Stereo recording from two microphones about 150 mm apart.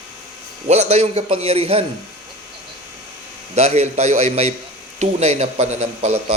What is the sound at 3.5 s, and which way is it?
Speech, 45° right (ahead or behind).